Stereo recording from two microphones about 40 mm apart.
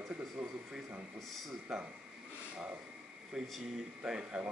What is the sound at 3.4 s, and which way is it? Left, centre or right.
Speech, centre.